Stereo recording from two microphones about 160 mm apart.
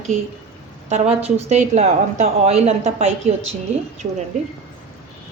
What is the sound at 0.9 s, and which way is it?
A woman's voice, 45° right (ahead or behind).